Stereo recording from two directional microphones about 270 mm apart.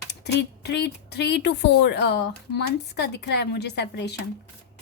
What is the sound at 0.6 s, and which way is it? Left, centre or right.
Speech, left.